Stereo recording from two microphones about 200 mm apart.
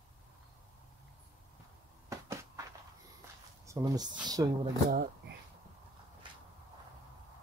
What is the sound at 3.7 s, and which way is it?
Speech, 20° right (ahead or behind).